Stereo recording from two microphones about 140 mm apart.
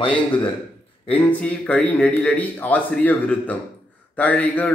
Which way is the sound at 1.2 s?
10° left (ahead or behind).